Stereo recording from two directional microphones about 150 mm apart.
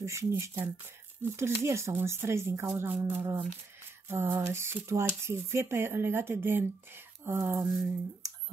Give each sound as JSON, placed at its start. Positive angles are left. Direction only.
{"t": 0.0, "sound": "speech", "side_deg": -20}